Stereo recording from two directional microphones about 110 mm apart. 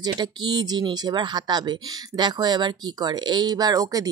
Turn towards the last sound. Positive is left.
turn(degrees=-35)  # may be behind; listen again after turning